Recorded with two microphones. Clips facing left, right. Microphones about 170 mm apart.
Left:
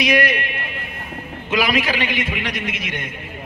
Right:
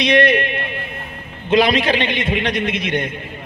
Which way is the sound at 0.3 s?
25° right (ahead or behind).